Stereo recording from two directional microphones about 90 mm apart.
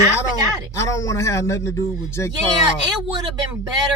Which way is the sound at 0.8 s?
35° left (ahead or behind).